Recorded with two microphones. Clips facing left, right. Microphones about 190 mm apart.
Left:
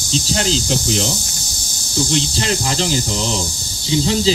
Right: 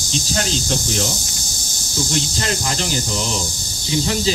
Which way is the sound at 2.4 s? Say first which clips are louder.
Left 3 dB; 30° left (ahead or behind).